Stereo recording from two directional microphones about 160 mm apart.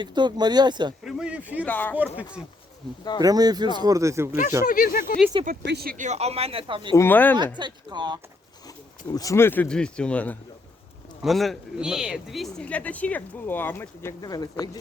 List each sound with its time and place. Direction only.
0.0 s speech: 25° right (ahead or behind)
1.0 s speech: 5° right (ahead or behind)
1.6 s speech: 10° left (ahead or behind)
3.2 s speech: 25° right (ahead or behind)
4.6 s speech: 65° left (ahead or behind)
5.5 s speech: 80° right; by 6.9 s 30° right (ahead or behind)
6.9 s speech: 15° left (ahead or behind)
7.6 s speech: 25° right (ahead or behind)
8.6 s speech: 20° left (ahead or behind)